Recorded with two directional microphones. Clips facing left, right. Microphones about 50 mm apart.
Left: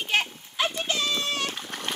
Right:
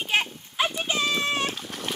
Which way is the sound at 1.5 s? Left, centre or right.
Centre.